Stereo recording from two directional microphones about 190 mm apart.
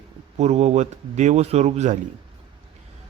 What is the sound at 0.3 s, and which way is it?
A man's voice, 35° right (ahead or behind).